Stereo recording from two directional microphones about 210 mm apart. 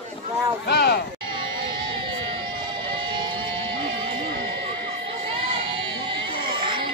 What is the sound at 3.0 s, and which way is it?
Music, 20° right (ahead or behind).